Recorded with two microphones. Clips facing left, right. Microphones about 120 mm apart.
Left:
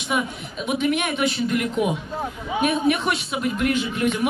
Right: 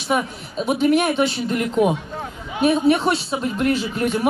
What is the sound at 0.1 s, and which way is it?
A woman's voice, 40° right (ahead or behind).